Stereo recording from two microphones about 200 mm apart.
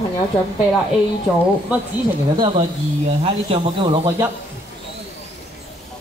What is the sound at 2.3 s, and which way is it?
Speech, 25° right (ahead or behind).